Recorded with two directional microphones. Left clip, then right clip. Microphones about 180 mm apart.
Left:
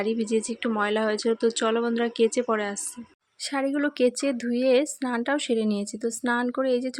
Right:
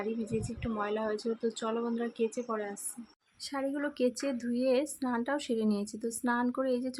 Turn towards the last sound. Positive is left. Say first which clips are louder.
# left 7 dB
turn(degrees=25)  # may be behind; listen again after turning